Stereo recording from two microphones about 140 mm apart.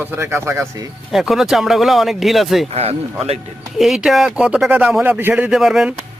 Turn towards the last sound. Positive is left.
turn(degrees=-5)  # may be behind; listen again after turning